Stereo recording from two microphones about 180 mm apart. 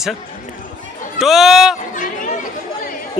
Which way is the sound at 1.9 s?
45° left (ahead or behind).